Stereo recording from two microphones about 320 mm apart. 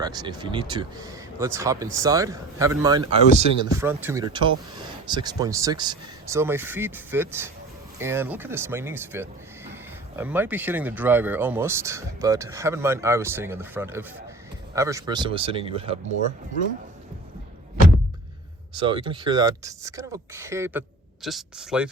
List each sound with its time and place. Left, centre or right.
0.0 s speech: centre
18.8 s speech: centre